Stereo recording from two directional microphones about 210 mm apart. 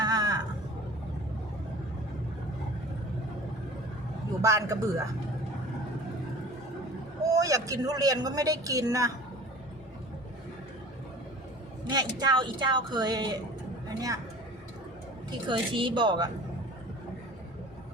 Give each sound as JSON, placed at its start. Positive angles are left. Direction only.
{"t": 0.0, "sound": "a sound", "side_deg": -20}
{"t": 4.4, "sound": "a man's voice", "side_deg": -15}
{"t": 7.3, "sound": "a man's voice", "side_deg": -15}
{"t": 11.9, "sound": "a woman's voice", "side_deg": -20}
{"t": 15.3, "sound": "speech", "side_deg": -20}